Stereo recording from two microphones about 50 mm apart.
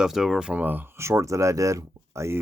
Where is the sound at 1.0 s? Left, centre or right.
Right.